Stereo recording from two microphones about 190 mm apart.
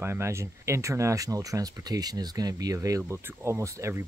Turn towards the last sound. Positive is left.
turn(degrees=-15)  # may be behind; listen again after turning